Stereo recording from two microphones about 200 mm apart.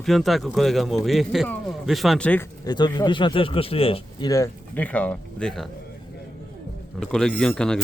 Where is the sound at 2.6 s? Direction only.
20° left (ahead or behind); by 5.7 s 5° left (ahead or behind).